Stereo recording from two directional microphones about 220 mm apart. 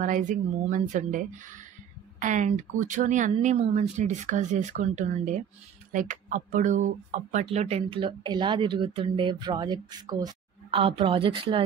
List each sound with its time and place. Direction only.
0.0 s speech: 35° right (ahead or behind)